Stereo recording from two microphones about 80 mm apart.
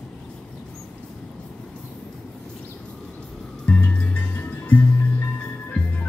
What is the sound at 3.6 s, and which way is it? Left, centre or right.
Music, centre.